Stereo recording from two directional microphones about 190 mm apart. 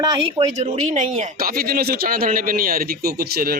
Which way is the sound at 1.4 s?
50° right (ahead or behind).